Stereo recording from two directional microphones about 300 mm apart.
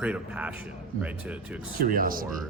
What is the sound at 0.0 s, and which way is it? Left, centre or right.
Speech, centre.